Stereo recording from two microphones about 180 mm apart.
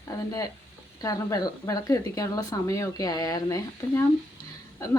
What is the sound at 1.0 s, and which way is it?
A woman's voice, 20° left (ahead or behind).